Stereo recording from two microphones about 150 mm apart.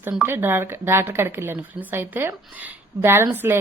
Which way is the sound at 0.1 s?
15° right (ahead or behind).